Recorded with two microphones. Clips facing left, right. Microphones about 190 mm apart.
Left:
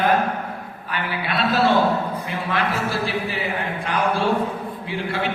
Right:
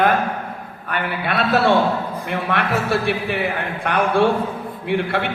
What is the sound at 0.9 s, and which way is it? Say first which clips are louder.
A man's voice: right 3 dB; 60° right (ahead or behind).